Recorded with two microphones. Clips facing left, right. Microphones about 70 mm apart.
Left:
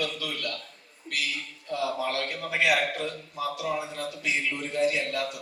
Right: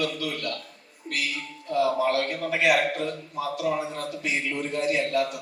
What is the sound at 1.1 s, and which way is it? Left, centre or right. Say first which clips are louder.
A man's voice: right 2 dB; right.